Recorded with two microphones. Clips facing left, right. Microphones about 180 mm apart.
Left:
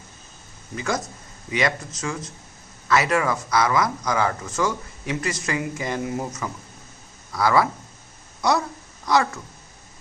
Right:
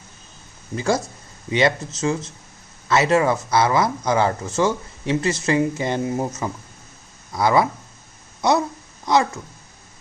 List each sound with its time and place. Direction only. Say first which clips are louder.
0.8 s speech: right 5 dB; 30° right (ahead or behind)